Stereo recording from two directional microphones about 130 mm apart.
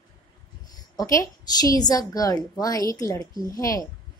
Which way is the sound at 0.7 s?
25° left (ahead or behind).